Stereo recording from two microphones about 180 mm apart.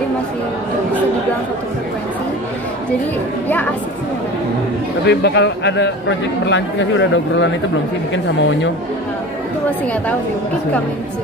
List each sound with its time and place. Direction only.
5.0 s a man's voice: 70° left (ahead or behind); by 7.4 s 90° left